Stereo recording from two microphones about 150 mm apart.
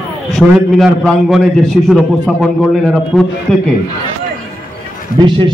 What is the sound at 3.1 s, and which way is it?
Speech, 5° right (ahead or behind).